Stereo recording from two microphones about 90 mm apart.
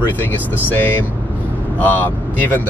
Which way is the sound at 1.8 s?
20° left (ahead or behind).